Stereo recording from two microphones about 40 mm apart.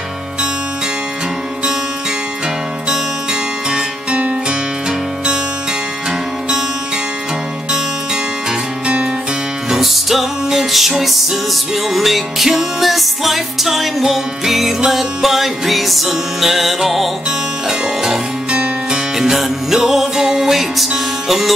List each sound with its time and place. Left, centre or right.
4.5 s music: centre
7.7 s music: centre
8.8 s music: right
9.7 s music: centre
17.6 s music: centre
19.1 s music: centre